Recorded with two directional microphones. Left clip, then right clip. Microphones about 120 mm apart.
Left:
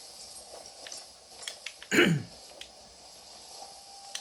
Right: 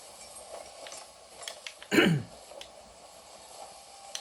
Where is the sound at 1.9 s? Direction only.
40° right (ahead or behind).